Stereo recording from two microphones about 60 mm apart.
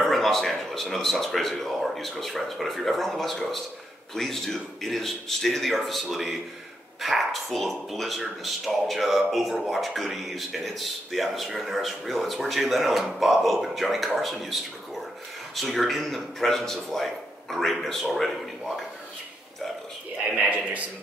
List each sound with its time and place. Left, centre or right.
0.0 s speech: centre
20.2 s a man's voice: right